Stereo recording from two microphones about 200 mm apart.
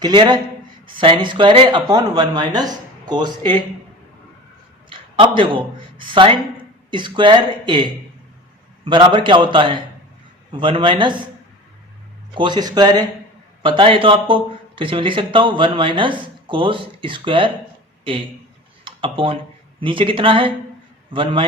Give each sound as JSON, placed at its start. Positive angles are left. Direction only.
{"t": 0.0, "sound": "speech", "side_deg": -20}
{"t": 4.9, "sound": "a sound", "side_deg": -25}
{"t": 6.0, "sound": "speech", "side_deg": -25}
{"t": 12.3, "sound": "speech", "side_deg": -25}
{"t": 18.9, "sound": "speech", "side_deg": -25}